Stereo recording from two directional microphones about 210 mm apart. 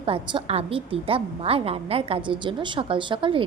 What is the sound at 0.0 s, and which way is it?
A woman's voice, 25° right (ahead or behind).